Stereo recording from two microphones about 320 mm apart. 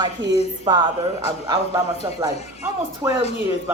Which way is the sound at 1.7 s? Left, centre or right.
Centre.